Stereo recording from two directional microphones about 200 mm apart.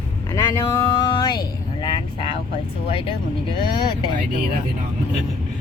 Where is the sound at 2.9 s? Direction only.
25° left (ahead or behind).